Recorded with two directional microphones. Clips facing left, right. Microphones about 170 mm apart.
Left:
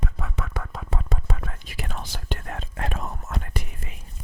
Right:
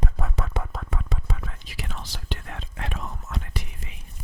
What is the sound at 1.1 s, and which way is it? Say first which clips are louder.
Whispering: left 2 dB; 50° left (ahead or behind).